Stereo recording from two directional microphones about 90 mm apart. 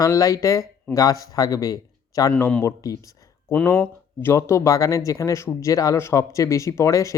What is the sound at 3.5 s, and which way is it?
Speech, 25° left (ahead or behind).